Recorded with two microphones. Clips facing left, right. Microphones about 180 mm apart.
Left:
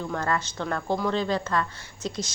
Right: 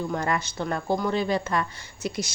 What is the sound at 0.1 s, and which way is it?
Speech, 15° right (ahead or behind).